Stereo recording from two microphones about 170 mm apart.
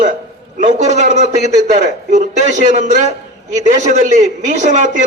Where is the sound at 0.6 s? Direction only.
45° right (ahead or behind).